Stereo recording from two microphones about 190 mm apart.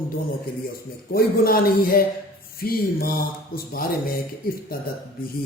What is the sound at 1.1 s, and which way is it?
Speech, 50° left (ahead or behind).